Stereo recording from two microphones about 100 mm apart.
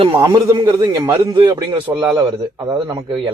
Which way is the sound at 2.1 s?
30° right (ahead or behind).